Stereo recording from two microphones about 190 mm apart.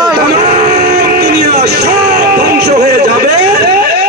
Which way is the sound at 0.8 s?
60° right (ahead or behind).